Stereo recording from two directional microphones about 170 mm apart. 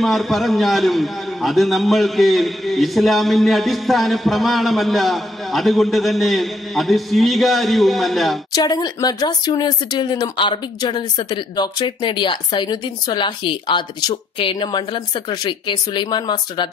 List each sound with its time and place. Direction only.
0.0 s a man's voice: centre (ahead or behind)
8.5 s speech: 25° left (ahead or behind)